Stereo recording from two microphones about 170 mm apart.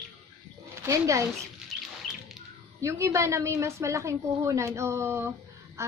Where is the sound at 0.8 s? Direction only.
20° right (ahead or behind).